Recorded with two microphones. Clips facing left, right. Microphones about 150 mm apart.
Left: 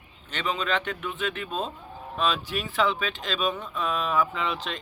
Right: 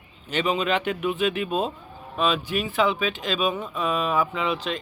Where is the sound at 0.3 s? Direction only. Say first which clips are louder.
Right 5 dB; 10° right (ahead or behind).